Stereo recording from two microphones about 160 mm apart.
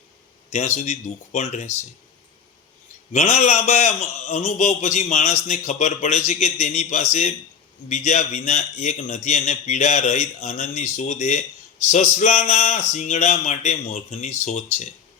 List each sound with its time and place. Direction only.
0.5 s a man's voice: 45° left (ahead or behind)
3.1 s a man's voice: 45° left (ahead or behind)